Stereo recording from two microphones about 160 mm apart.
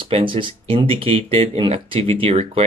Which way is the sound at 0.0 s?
30° right (ahead or behind).